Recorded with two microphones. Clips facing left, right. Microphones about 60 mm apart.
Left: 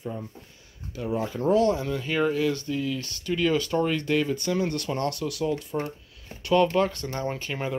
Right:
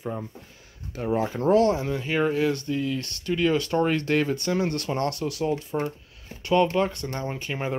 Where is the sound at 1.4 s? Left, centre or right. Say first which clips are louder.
Right 1 dB; centre.